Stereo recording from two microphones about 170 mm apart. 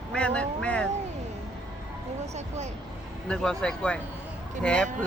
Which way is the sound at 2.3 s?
40° right (ahead or behind).